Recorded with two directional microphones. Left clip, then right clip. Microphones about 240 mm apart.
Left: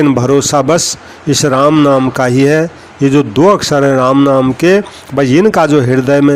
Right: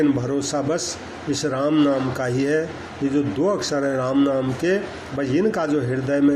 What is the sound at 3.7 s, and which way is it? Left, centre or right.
Speech, left.